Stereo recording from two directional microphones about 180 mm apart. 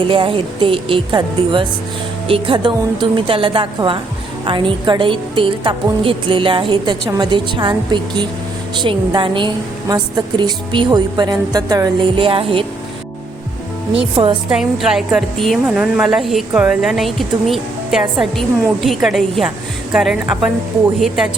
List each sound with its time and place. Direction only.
0.0 s a woman's voice: 30° right (ahead or behind)
14.2 s a woman's voice: 30° right (ahead or behind)
14.5 s speech: 5° right (ahead or behind)